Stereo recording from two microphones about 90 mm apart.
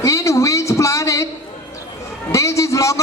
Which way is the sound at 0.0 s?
35° left (ahead or behind).